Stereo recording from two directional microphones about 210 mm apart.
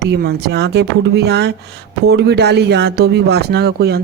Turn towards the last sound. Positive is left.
turn(degrees=-50)  # may be behind; listen again after turning